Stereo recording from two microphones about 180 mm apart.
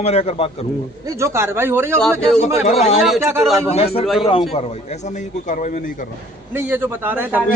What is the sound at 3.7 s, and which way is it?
Speech, 35° left (ahead or behind).